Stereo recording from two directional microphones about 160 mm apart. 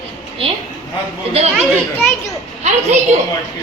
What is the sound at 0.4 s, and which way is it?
Speech, 35° right (ahead or behind).